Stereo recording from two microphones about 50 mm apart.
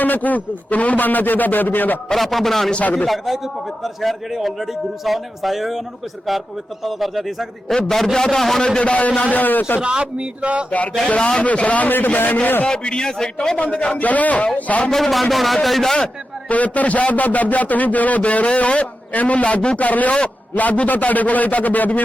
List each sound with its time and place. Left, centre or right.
0.0 s a man's voice: left
2.1 s a man's voice: centre
2.7 s a man's voice: left
3.1 s a man's voice: centre
6.8 s a man's voice: centre
8.6 s a man's voice: centre
9.0 s a man's voice: left
9.8 s speech: right
11.1 s a man's voice: left
12.6 s a man's voice: centre
13.6 s a man's voice: left
14.8 s a man's voice: centre
16.5 s a man's voice: left